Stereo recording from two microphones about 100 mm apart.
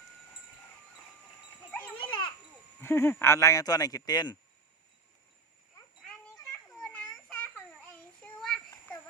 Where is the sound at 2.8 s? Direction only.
25° left (ahead or behind); by 4.4 s 45° left (ahead or behind).